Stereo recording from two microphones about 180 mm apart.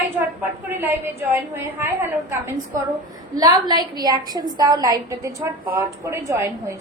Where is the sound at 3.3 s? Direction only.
20° right (ahead or behind).